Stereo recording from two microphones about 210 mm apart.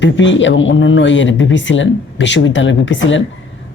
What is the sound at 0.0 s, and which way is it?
Speech, 60° left (ahead or behind).